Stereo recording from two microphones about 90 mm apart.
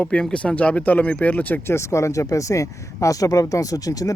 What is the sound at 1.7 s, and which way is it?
Speech, 35° left (ahead or behind).